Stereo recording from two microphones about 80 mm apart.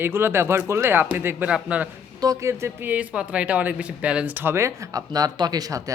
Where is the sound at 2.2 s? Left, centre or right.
Right.